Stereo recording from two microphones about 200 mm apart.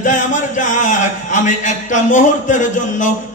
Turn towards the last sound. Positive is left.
turn(degrees=40)  # may be behind; listen again after turning